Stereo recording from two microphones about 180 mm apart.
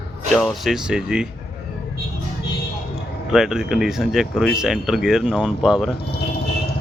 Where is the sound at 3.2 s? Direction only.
5° right (ahead or behind).